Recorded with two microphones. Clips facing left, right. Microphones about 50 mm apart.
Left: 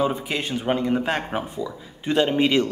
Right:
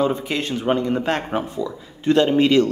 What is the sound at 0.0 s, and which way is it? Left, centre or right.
A man's voice, centre.